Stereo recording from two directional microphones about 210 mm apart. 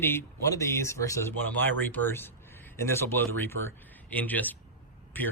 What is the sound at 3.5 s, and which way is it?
Speech, 75° right (ahead or behind).